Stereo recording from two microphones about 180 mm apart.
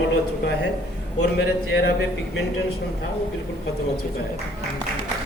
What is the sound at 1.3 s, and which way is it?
Speech, 70° left (ahead or behind).